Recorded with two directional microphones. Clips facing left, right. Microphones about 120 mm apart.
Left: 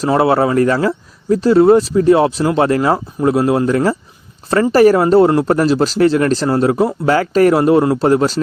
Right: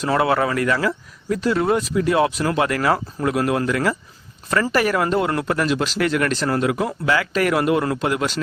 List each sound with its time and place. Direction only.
0.0 s speech: 30° left (ahead or behind)